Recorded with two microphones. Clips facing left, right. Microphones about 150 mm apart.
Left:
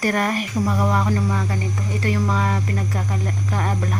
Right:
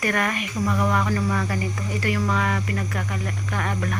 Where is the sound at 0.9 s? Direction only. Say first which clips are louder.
Left 2 dB; 20° left (ahead or behind).